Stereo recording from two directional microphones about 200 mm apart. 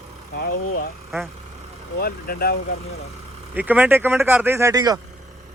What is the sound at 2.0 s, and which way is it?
Speech, 50° left (ahead or behind).